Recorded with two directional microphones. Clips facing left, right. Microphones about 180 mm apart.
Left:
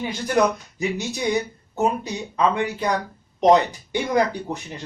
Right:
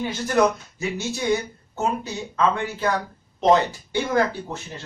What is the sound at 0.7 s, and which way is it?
Speech, 15° left (ahead or behind).